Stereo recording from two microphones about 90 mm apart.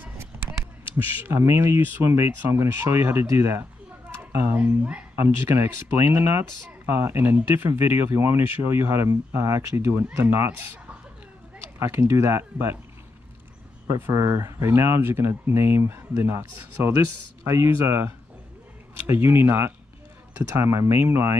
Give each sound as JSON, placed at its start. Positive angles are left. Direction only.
{"t": 0.2, "sound": "speech", "side_deg": -25}
{"t": 5.1, "sound": "speech", "side_deg": -30}
{"t": 11.8, "sound": "speech", "side_deg": -30}
{"t": 13.8, "sound": "speech", "side_deg": -30}